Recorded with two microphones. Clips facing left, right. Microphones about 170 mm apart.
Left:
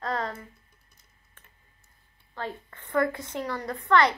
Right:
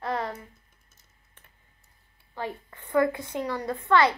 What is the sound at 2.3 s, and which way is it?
A child's voice, 15° right (ahead or behind).